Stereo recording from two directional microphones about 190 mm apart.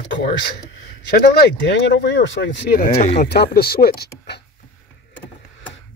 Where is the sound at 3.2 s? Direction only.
55° left (ahead or behind).